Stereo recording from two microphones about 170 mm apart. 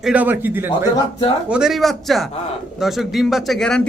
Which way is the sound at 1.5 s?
5° right (ahead or behind).